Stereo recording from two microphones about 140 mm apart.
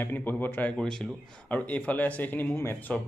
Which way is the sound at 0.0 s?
15° left (ahead or behind).